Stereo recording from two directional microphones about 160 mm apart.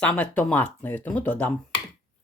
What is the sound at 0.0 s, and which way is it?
Speech, 10° left (ahead or behind).